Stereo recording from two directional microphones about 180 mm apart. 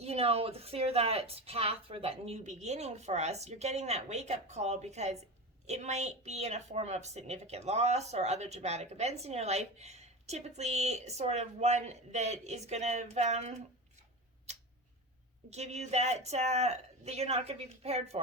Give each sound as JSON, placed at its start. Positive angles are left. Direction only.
{"t": 0.0, "sound": "a woman's voice", "side_deg": -35}
{"t": 15.4, "sound": "a woman's voice", "side_deg": -35}